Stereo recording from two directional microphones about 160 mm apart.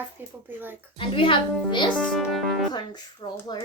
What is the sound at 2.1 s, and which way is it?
Music, centre (ahead or behind).